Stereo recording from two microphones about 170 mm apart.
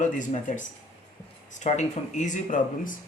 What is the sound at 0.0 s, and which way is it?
Speech, 45° left (ahead or behind).